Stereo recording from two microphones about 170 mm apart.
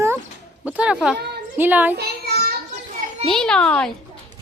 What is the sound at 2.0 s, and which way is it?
Child singing, 65° right (ahead or behind).